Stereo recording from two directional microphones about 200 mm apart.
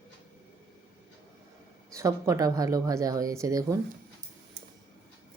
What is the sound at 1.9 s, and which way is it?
Speech, 15° right (ahead or behind).